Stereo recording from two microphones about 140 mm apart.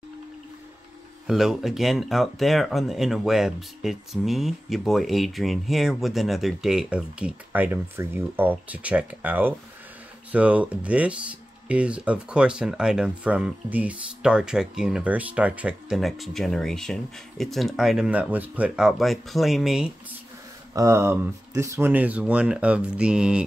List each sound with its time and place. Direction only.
1.2 s speech: centre (ahead or behind)
20.7 s speech: 20° right (ahead or behind)